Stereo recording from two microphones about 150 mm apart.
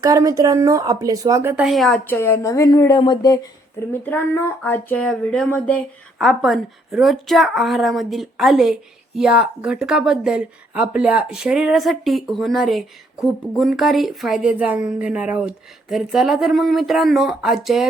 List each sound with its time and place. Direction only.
0.0 s speech: 25° right (ahead or behind)
1.6 s speech: centre (ahead or behind)
2.0 s a woman's voice: 15° left (ahead or behind); by 17.8 s centre (ahead or behind)